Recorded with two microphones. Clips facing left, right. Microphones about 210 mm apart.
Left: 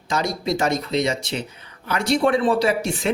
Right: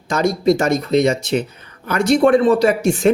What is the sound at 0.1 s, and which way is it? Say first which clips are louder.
A man's voice: right 8 dB; 50° right (ahead or behind).